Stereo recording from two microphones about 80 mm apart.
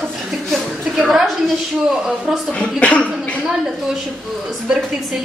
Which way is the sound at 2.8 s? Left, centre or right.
Centre.